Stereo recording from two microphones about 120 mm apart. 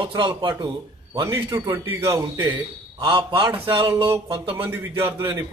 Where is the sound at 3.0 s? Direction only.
45° right (ahead or behind).